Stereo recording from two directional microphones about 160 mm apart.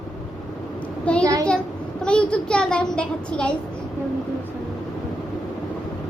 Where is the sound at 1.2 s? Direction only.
20° right (ahead or behind).